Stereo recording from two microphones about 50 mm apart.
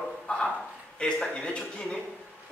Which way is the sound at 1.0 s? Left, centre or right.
Centre.